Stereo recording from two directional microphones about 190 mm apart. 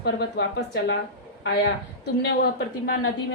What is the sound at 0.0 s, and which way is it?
Speech, 60° left (ahead or behind).